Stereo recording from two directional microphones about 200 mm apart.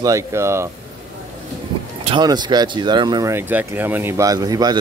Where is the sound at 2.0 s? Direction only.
25° right (ahead or behind).